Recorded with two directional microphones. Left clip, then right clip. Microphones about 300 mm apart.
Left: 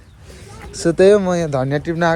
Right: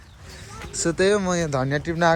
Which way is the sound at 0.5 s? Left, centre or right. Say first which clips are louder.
Left 7 dB; centre.